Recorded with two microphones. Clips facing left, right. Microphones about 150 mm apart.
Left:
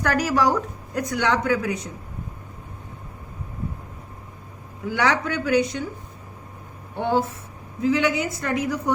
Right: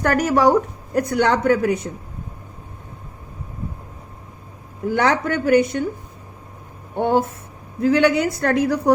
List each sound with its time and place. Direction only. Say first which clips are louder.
0.0 s speech: right 5 dB; 55° right (ahead or behind)
4.9 s speech: right 4 dB; 45° right (ahead or behind)
6.9 s speech: right 4 dB; 50° right (ahead or behind)
7.8 s a woman's voice: right 5 dB; 65° right (ahead or behind)